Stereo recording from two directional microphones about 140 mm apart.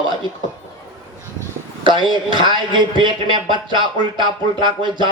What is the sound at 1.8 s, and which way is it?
Speech, 35° right (ahead or behind).